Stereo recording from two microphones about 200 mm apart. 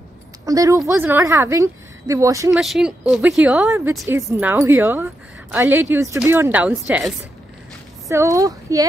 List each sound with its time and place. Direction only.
0.5 s a woman's voice: 15° right (ahead or behind)
2.5 s a woman's voice: centre (ahead or behind)
8.1 s a woman's voice: 15° right (ahead or behind)